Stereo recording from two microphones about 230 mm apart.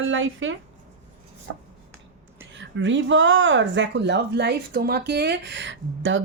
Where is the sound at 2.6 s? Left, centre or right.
Right.